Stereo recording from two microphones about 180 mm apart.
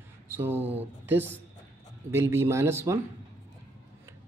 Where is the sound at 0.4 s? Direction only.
10° right (ahead or behind).